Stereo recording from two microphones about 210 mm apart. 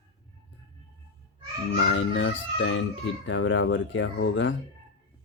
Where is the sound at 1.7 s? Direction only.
60° left (ahead or behind).